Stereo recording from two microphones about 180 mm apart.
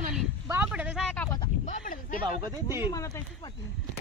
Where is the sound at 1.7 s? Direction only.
50° left (ahead or behind).